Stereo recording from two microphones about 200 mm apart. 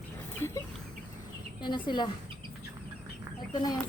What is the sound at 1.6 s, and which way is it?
Speech, 25° left (ahead or behind).